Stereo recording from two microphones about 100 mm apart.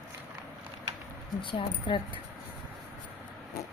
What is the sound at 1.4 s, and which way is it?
Speech, 55° left (ahead or behind).